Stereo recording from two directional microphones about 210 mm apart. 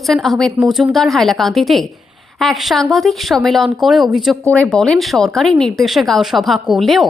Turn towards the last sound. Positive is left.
turn(degrees=0)  # may be behind; listen again after turning